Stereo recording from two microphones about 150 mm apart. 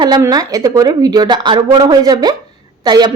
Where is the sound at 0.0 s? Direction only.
25° right (ahead or behind).